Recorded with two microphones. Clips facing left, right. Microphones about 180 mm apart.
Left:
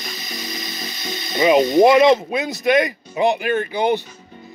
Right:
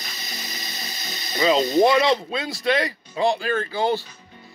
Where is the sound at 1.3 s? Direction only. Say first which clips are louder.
Left 5 dB; 20° left (ahead or behind).